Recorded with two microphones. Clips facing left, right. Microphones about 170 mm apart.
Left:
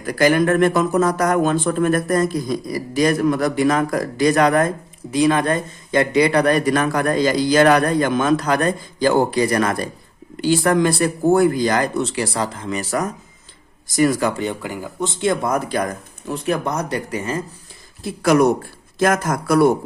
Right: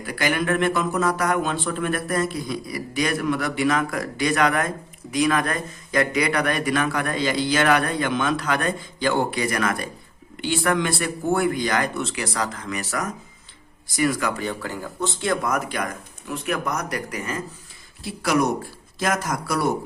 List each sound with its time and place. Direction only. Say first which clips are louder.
0.0 s speech: left 8 dB; 40° left (ahead or behind)
13.8 s speech: left 5 dB; 40° left (ahead or behind)
18.0 s speech: left 7 dB; 50° left (ahead or behind)